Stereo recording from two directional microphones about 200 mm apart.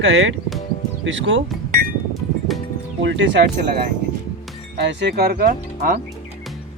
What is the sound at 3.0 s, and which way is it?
Speech, 65° right (ahead or behind).